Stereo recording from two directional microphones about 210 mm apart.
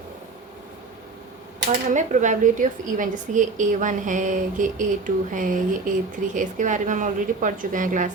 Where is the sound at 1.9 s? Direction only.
35° right (ahead or behind).